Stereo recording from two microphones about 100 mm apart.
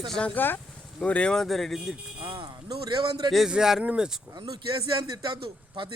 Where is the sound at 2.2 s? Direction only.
60° right (ahead or behind).